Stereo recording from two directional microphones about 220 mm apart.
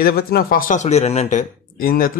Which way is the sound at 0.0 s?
45° left (ahead or behind).